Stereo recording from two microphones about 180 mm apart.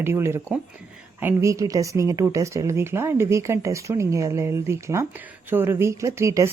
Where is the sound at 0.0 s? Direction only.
15° right (ahead or behind).